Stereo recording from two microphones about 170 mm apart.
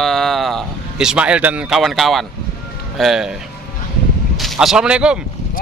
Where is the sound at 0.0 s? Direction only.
Centre (ahead or behind).